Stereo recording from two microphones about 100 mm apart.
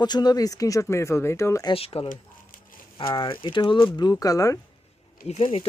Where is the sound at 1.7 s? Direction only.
75° left (ahead or behind).